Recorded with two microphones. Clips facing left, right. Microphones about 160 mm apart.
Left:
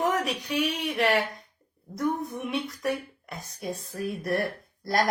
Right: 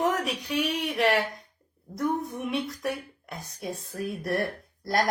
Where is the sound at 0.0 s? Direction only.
Centre (ahead or behind).